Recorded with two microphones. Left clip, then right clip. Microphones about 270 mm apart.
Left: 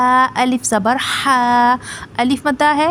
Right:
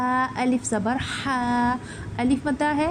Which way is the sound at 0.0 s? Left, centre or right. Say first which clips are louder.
Left 11 dB; left.